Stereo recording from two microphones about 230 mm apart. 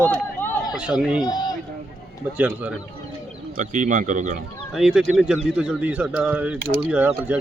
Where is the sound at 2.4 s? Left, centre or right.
Centre.